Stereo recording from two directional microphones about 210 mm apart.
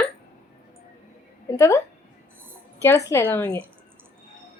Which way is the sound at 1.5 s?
15° left (ahead or behind).